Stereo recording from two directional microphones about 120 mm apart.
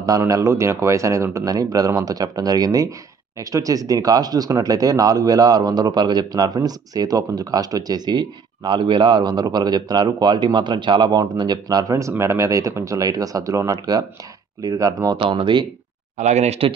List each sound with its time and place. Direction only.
0.0 s speech: 30° right (ahead or behind)
15.1 s speech: 45° right (ahead or behind)
16.2 s speech: 70° right (ahead or behind)